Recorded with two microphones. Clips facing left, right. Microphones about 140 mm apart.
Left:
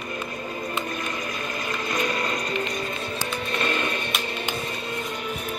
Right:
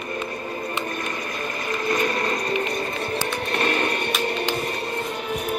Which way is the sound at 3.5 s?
45° right (ahead or behind).